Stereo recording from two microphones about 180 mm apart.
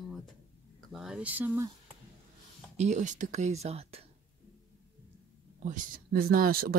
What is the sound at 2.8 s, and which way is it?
Speech, 40° right (ahead or behind).